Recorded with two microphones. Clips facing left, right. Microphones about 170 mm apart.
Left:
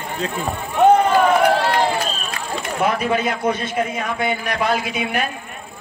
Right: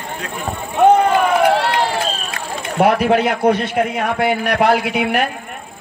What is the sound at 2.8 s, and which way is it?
A man's voice, 65° right (ahead or behind).